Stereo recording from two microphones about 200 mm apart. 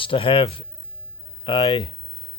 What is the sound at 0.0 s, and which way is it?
Speech, 25° left (ahead or behind).